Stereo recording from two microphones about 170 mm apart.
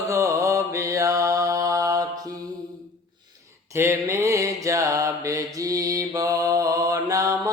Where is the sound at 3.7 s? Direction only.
15° right (ahead or behind).